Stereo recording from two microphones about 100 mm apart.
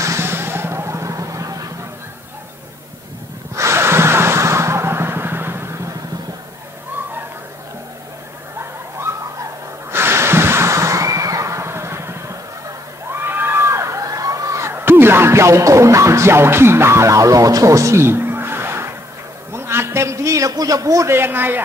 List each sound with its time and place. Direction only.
0.0 s vehicle: 25° right (ahead or behind)
3.5 s vehicle: 25° right (ahead or behind)
9.8 s a sound: 25° right (ahead or behind)